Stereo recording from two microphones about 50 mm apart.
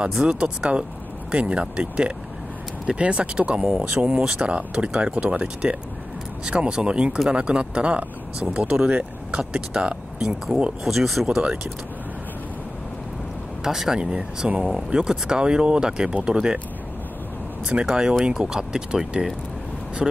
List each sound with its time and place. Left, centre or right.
0.2 s speech: centre
10.8 s speech: centre
13.7 s speech: centre
17.6 s speech: centre